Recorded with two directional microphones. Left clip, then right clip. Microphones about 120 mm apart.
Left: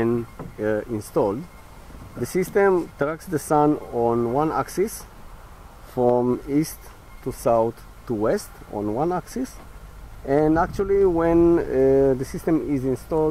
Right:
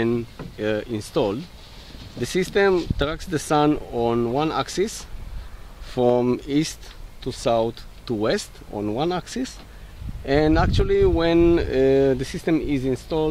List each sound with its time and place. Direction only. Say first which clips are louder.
0.6 s speech: left 1 dB; 35° right (ahead or behind)
6.0 s speech: even; 40° right (ahead or behind)
8.2 s speech: even; 45° right (ahead or behind)
8.7 s speech: left 1 dB; 30° right (ahead or behind)
9.0 s speech: even; 40° right (ahead or behind)
11.1 s speech: left 1 dB; 35° right (ahead or behind)